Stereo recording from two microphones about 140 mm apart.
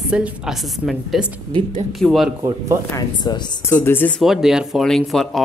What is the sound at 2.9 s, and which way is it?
Speech, 30° left (ahead or behind).